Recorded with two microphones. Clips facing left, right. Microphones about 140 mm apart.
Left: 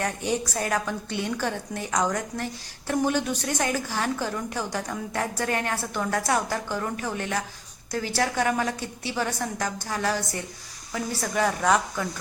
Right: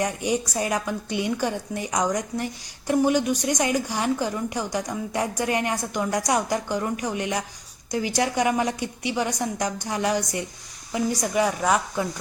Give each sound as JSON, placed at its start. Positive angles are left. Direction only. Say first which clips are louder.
{"t": 0.0, "sound": "a woman's voice", "louder": "right 2 dB", "side_deg": -10}